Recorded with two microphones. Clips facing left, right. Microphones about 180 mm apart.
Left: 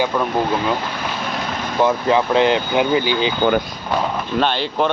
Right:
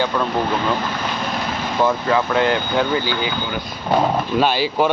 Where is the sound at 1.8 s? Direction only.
20° left (ahead or behind).